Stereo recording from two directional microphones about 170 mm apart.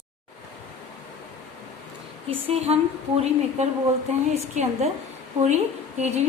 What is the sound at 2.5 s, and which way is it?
Speech, 35° right (ahead or behind).